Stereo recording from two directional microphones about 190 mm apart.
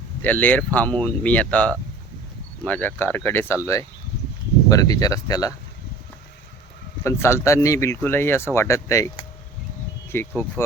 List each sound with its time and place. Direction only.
0.2 s speech: 10° left (ahead or behind)
4.7 s speech: 20° left (ahead or behind)
7.0 s speech: 15° left (ahead or behind)